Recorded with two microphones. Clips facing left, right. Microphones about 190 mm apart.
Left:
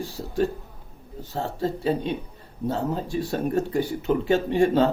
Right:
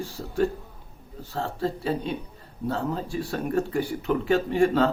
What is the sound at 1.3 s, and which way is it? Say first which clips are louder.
Speech: left 1 dB; 20° left (ahead or behind).